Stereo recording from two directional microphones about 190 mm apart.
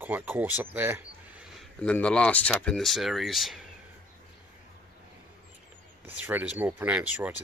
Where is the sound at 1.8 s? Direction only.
5° left (ahead or behind).